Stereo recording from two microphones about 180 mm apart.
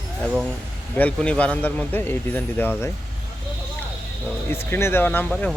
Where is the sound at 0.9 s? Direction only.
5° left (ahead or behind).